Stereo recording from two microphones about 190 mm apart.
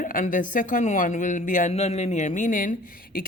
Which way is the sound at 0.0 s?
45° left (ahead or behind).